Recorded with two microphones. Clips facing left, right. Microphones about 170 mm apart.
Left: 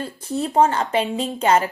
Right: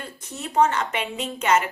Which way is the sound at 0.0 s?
30° left (ahead or behind).